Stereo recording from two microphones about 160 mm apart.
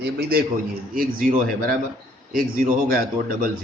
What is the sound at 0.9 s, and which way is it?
Speech, 60° right (ahead or behind).